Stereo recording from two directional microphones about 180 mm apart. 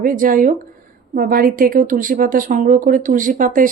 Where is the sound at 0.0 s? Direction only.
50° right (ahead or behind).